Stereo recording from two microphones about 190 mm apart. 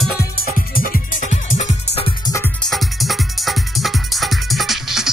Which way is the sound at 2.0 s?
20° left (ahead or behind).